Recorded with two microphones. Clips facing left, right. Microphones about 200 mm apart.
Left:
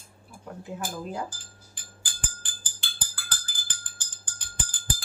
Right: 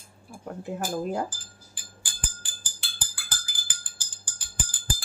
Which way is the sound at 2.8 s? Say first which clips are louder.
Left 1 dB; 5° right (ahead or behind).